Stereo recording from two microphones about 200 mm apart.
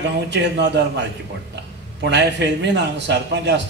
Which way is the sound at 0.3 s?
60° right (ahead or behind).